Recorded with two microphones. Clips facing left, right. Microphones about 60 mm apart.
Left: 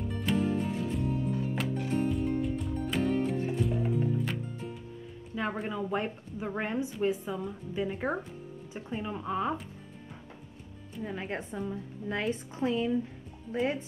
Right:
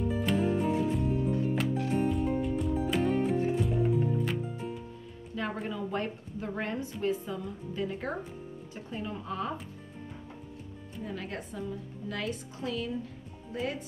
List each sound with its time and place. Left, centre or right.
0.0 s music: centre
5.3 s music: centre
5.7 s a woman's voice: centre
11.1 s a woman's voice: left